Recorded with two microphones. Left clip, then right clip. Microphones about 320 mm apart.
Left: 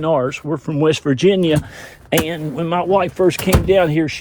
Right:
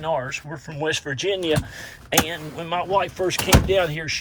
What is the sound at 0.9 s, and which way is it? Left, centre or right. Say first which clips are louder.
Speech: left 9 dB; centre.